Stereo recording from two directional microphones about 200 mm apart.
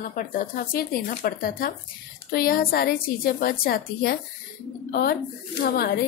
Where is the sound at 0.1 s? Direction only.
45° left (ahead or behind).